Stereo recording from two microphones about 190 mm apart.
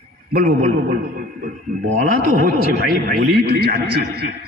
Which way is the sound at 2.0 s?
45° right (ahead or behind).